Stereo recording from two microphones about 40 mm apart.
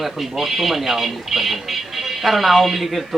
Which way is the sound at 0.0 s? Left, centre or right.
Centre.